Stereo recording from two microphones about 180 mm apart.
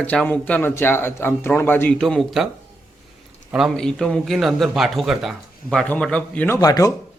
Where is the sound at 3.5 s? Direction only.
Centre (ahead or behind); by 6.9 s 20° left (ahead or behind).